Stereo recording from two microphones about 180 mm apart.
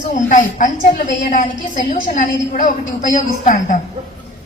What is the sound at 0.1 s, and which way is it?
A woman's voice, 45° left (ahead or behind).